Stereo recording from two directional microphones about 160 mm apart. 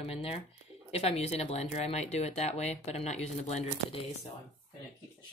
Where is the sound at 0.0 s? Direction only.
35° left (ahead or behind).